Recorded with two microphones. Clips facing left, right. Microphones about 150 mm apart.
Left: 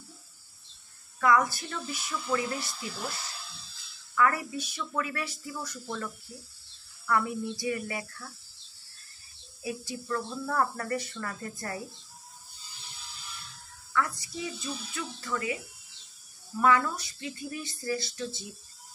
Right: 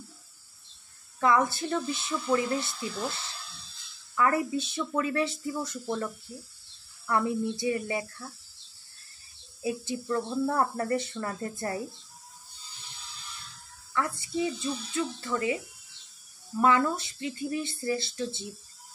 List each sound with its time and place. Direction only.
1.2 s speech: 25° right (ahead or behind)
4.1 s speech: 25° right (ahead or behind)
7.1 s speech: 25° right (ahead or behind)
9.6 s speech: 25° right (ahead or behind)
13.9 s speech: 25° right (ahead or behind)
16.6 s speech: 25° right (ahead or behind)